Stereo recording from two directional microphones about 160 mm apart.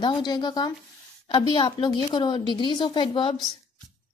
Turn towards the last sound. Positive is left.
turn(degrees=30)  # may be behind; listen again after turning